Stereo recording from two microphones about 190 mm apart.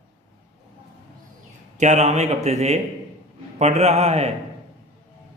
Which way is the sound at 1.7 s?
40° right (ahead or behind).